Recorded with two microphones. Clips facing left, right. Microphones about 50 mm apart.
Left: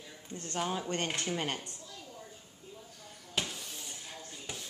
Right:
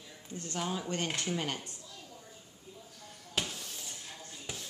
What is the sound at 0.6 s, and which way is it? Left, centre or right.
Speech, centre.